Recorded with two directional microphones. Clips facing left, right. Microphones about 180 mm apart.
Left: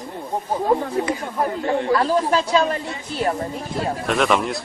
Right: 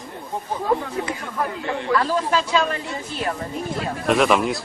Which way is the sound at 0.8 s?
35° left (ahead or behind).